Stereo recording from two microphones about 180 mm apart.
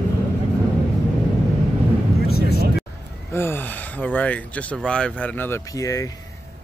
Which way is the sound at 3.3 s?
10° left (ahead or behind).